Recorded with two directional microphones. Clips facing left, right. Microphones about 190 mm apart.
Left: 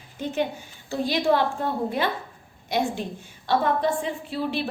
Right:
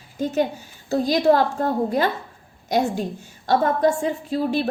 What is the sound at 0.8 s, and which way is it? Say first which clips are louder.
A woman's voice: right 5 dB; 40° right (ahead or behind).